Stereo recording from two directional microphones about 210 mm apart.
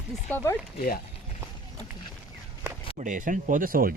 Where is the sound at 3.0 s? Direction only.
40° right (ahead or behind).